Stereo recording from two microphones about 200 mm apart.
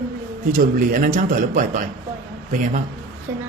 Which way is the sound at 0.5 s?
45° right (ahead or behind).